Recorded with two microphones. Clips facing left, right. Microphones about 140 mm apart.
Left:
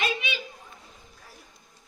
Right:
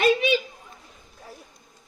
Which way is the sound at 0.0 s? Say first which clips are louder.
Right 10 dB; 40° right (ahead or behind).